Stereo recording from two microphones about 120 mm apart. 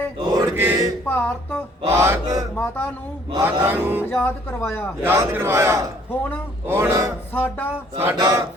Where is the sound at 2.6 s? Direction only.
10° left (ahead or behind).